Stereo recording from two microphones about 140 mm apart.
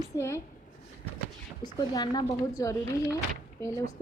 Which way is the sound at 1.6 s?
30° left (ahead or behind).